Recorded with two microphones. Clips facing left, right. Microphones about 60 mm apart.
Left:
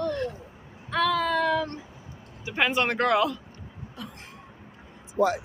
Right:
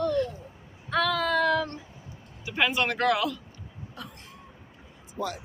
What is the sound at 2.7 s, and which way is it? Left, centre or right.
Speech, left.